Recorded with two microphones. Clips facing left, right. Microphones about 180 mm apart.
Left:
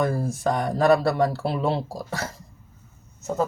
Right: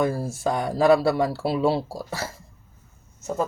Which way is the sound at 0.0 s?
5° right (ahead or behind).